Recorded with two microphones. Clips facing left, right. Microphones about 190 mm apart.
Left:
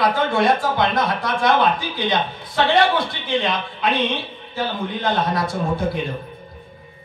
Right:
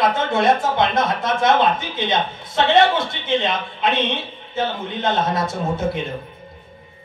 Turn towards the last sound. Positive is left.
turn(degrees=-25)  # may be behind; listen again after turning